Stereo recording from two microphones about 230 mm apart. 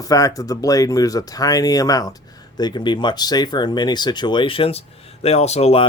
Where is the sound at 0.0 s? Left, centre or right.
Centre.